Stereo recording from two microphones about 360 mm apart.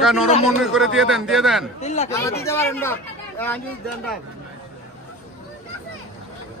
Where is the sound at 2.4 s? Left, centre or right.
Centre.